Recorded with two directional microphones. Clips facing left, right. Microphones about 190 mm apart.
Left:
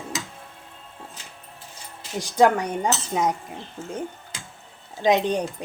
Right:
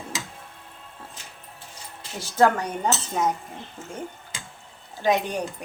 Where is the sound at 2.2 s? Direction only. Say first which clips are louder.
Left 2 dB; 15° left (ahead or behind).